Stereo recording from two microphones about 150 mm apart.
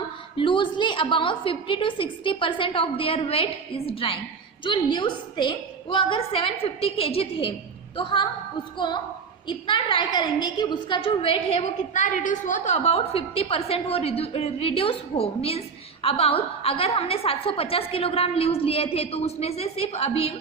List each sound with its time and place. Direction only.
0.3 s a woman's voice: 35° left (ahead or behind)
9.5 s a woman's voice: 35° left (ahead or behind)
11.9 s a woman's voice: 55° left (ahead or behind)